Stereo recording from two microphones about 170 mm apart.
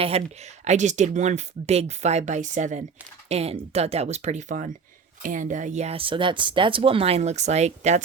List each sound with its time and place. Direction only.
0.1 s speech: 40° right (ahead or behind)